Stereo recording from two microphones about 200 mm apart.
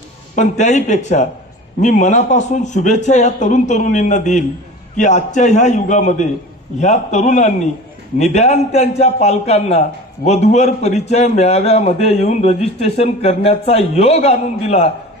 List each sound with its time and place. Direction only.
0.4 s a man's voice: 35° left (ahead or behind)